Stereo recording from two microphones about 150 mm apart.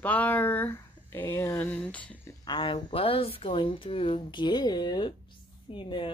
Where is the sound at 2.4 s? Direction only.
35° left (ahead or behind).